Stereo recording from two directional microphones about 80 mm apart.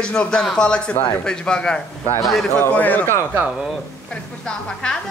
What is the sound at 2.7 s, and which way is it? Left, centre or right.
Speech, left.